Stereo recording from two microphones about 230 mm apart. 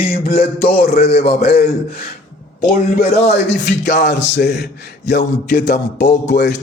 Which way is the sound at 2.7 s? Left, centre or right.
Left.